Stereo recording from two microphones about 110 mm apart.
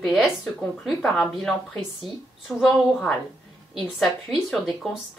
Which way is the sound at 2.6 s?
Centre (ahead or behind).